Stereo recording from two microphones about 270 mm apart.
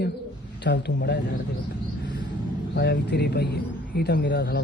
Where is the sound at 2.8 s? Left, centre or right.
Left.